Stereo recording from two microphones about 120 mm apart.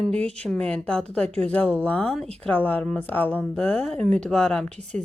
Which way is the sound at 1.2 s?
60° right (ahead or behind).